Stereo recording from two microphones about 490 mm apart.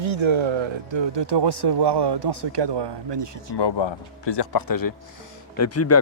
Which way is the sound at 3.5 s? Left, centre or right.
Left.